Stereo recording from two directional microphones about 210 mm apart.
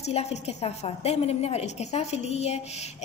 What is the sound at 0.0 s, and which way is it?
A woman's voice, 30° left (ahead or behind).